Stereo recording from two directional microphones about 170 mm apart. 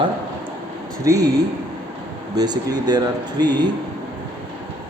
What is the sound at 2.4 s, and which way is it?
A man's voice, 25° right (ahead or behind).